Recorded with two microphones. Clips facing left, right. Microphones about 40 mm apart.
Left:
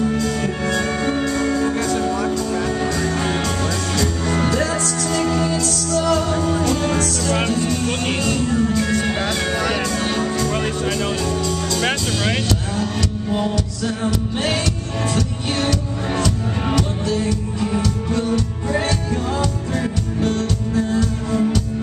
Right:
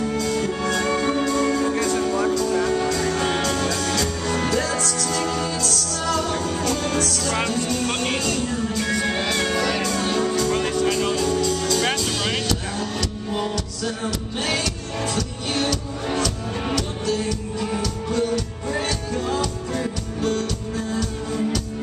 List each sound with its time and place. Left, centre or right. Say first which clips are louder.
0.4 s music: left 2 dB; left
0.8 s music: left 1 dB; centre
2.9 s music: left 1 dB; left
3.4 s music: left 1 dB; left
8.0 s music: left 3 dB; left
9.9 s music: left 1 dB; left
10.5 s music: even; left
11.0 s music: even; left
11.8 s music: left 2 dB; centre
15.1 s music: left 3 dB; left
18.7 s music: left 4 dB; centre